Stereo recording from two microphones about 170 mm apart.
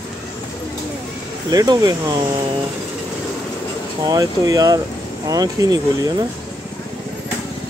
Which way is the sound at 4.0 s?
20° right (ahead or behind).